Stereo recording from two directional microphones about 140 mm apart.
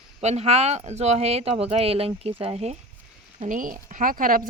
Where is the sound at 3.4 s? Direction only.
75° right (ahead or behind).